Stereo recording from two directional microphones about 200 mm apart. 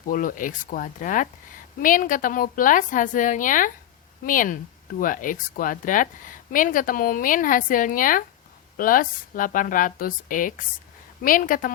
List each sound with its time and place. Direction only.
0.1 s a woman's voice: 45° left (ahead or behind)